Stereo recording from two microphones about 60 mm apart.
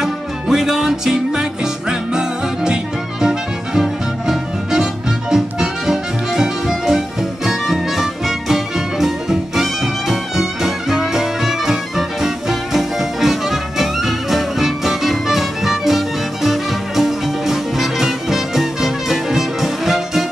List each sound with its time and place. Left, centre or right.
0.0 s music: centre